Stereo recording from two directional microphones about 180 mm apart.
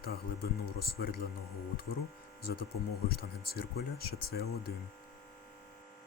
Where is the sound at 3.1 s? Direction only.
60° left (ahead or behind).